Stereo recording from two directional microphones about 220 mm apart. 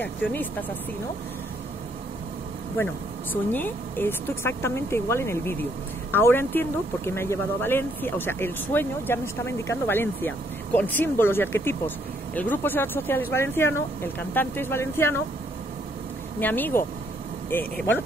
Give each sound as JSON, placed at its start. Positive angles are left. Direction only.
{"t": 0.0, "sound": "speech", "side_deg": 10}
{"t": 3.5, "sound": "speech", "side_deg": 10}
{"t": 16.3, "sound": "speech", "side_deg": 10}